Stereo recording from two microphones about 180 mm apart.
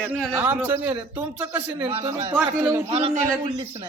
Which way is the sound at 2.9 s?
30° right (ahead or behind).